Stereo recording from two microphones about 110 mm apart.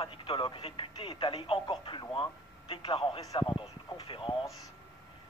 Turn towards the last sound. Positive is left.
turn(degrees=50)  # may be behind; listen again after turning